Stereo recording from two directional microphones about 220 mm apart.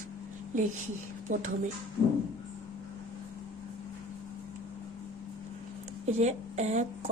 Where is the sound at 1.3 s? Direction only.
35° right (ahead or behind).